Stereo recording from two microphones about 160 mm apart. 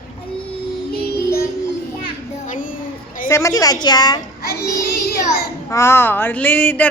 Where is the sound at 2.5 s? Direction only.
55° left (ahead or behind).